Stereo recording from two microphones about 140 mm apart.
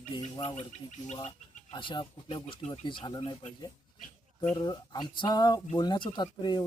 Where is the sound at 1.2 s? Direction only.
50° left (ahead or behind).